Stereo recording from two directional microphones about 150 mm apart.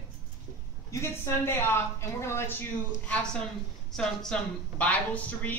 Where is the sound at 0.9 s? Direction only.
15° left (ahead or behind).